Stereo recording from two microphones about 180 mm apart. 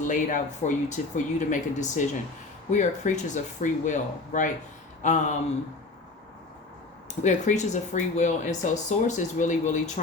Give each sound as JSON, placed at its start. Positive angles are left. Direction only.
{"t": 0.0, "sound": "speech", "side_deg": 45}
{"t": 7.2, "sound": "speech", "side_deg": 40}